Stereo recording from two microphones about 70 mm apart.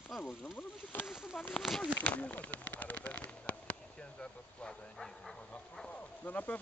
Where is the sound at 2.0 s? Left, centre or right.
Left; by 5.4 s centre.